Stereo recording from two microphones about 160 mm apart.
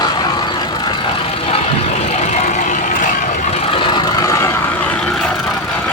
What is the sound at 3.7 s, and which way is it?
Vehicle, 25° left (ahead or behind).